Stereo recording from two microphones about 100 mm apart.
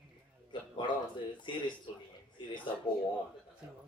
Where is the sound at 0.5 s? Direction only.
55° left (ahead or behind).